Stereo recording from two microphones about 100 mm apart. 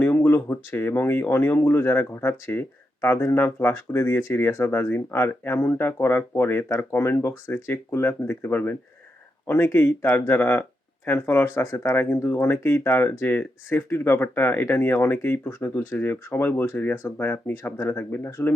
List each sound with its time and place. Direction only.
0.0 s speech: 20° left (ahead or behind)